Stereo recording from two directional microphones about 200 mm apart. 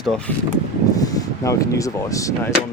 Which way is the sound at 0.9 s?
20° left (ahead or behind).